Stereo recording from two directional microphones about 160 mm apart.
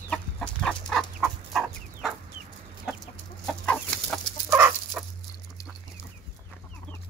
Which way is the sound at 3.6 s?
5° left (ahead or behind).